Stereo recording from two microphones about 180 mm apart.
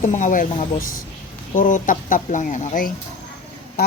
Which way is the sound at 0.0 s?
45° left (ahead or behind).